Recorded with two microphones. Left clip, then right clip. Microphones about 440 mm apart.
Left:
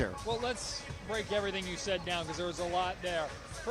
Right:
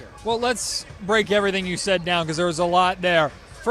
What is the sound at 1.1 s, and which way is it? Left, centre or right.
A man's voice, right.